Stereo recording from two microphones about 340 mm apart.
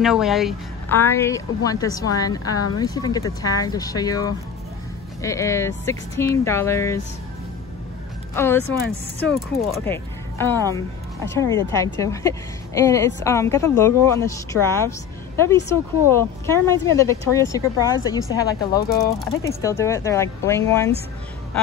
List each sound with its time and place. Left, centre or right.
0.0 s speech: centre
8.4 s speech: centre
9.8 s speech: centre
18.8 s speech: left
19.0 s speech: centre